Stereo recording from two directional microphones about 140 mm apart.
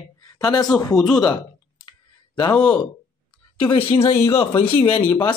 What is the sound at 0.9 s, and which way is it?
Speech, 5° left (ahead or behind).